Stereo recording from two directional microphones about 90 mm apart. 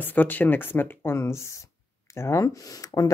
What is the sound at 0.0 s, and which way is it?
A woman's voice, 20° left (ahead or behind).